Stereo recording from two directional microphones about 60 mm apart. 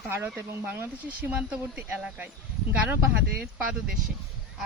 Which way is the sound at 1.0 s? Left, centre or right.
Right.